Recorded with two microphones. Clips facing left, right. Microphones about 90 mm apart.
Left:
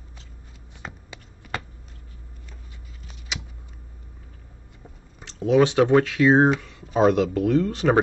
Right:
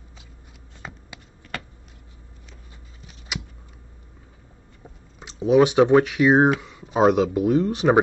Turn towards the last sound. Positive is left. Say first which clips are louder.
# right 1 dB
turn(degrees=-15)  # may be behind; listen again after turning